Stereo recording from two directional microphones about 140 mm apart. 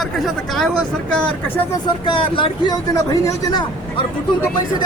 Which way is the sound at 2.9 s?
25° left (ahead or behind).